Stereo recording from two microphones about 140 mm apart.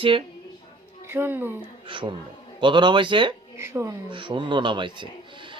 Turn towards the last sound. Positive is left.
turn(degrees=-35)  # may be behind; listen again after turning